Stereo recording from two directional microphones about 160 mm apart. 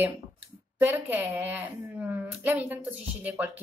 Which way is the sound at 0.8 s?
10° right (ahead or behind).